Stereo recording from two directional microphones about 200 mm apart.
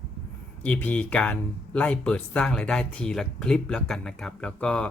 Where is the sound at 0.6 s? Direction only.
10° left (ahead or behind).